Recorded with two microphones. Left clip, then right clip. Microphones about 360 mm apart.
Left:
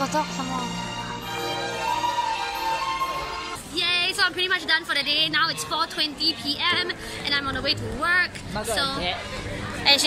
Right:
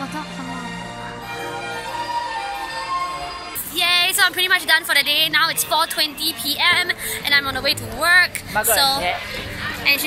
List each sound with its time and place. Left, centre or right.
3.7 s speech: centre
9.9 s a woman's voice: left